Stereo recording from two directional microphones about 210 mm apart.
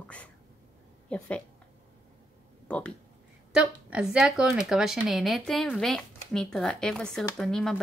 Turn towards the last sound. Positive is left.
turn(degrees=5)  # may be behind; listen again after turning